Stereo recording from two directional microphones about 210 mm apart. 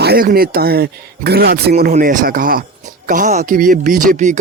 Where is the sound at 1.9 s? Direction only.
35° right (ahead or behind).